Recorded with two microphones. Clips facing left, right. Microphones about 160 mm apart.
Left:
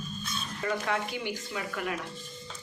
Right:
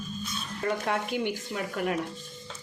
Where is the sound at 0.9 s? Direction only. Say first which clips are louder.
Right 3 dB; 50° right (ahead or behind).